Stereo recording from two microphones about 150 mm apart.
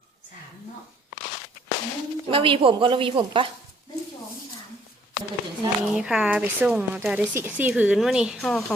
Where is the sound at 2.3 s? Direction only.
35° right (ahead or behind).